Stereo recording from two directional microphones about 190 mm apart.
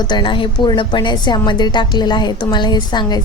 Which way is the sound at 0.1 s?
25° left (ahead or behind).